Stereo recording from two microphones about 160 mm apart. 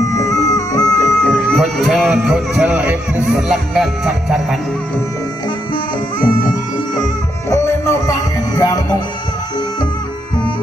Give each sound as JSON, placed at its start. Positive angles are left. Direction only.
{"t": 0.0, "sound": "music", "side_deg": 20}
{"t": 1.2, "sound": "music", "side_deg": 5}
{"t": 7.4, "sound": "music", "side_deg": 20}